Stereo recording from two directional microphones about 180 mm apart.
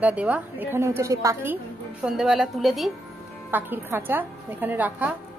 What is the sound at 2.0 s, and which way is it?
Speech, 5° right (ahead or behind).